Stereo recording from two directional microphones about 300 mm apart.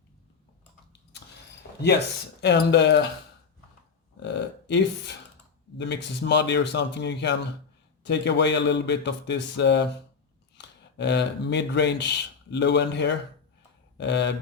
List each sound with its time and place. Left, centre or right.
2.4 s speech: left
4.2 s speech: left